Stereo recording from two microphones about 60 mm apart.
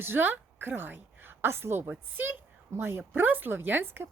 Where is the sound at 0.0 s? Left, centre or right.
Right.